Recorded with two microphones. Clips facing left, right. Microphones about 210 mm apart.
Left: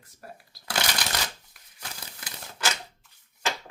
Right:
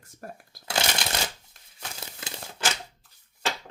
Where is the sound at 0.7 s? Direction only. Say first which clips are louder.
Right 2 dB; 25° right (ahead or behind).